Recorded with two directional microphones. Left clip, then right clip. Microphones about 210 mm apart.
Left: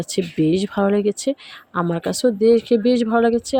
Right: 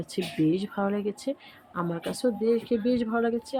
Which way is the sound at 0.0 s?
35° left (ahead or behind).